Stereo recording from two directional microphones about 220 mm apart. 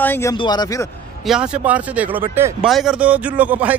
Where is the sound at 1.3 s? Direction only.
5° right (ahead or behind).